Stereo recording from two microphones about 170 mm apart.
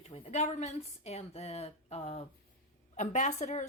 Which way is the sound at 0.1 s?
40° left (ahead or behind).